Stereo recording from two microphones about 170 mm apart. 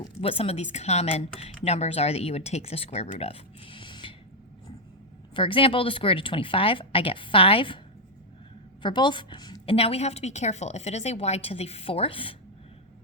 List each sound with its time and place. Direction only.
0.2 s speech: 35° left (ahead or behind)
5.3 s speech: 30° left (ahead or behind)
8.8 s speech: 25° left (ahead or behind)